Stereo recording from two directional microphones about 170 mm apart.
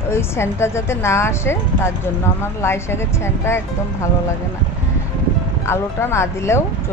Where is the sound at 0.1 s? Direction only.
15° left (ahead or behind).